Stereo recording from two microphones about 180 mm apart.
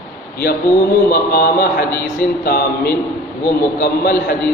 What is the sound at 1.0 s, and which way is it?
A man's voice, 55° left (ahead or behind).